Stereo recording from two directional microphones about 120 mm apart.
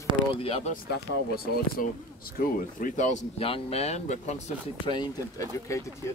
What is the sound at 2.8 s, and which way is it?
Speech, 90° left.